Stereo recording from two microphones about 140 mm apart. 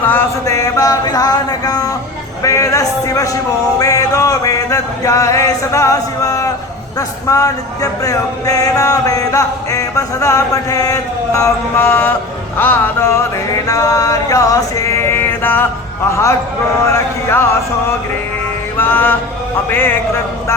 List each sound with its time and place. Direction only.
0.1 s a sound: 20° left (ahead or behind)
2.4 s music: 20° left (ahead or behind)
7.3 s speech: 25° left (ahead or behind)
12.5 s music: 15° left (ahead or behind)
13.7 s male singing: 25° left (ahead or behind)
16.0 s speech: 20° left (ahead or behind)
18.8 s music: 15° left (ahead or behind)